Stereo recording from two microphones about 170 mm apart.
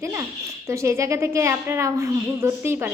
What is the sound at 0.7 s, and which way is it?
A woman's voice, 15° right (ahead or behind).